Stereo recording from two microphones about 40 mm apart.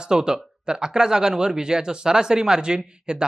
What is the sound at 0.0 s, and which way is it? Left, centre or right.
Speech, centre.